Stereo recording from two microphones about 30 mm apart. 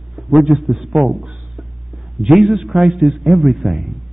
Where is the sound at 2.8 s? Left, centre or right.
Right.